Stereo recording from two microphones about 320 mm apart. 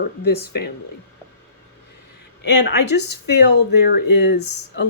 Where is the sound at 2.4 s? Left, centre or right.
Left.